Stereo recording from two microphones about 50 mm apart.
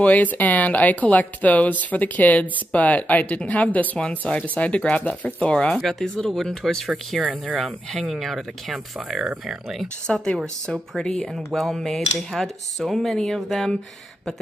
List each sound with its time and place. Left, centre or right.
0.0 s speech: left
5.8 s speech: centre
7.2 s speech: centre
8.0 s speech: centre
10.0 s speech: centre